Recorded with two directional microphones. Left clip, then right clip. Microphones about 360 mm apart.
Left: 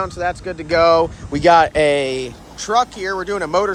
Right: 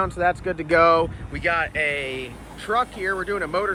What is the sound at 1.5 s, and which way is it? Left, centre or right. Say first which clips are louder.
Speech: left 10 dB; left.